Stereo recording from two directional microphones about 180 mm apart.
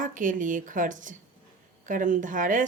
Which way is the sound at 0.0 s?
45° right (ahead or behind).